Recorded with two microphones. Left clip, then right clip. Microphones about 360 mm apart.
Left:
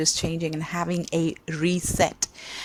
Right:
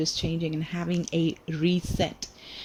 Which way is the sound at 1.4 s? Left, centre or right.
Centre.